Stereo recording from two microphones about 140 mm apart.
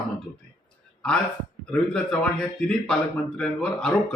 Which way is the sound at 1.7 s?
5° left (ahead or behind).